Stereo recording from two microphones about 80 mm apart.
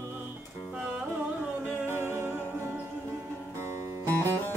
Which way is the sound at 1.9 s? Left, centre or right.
Right.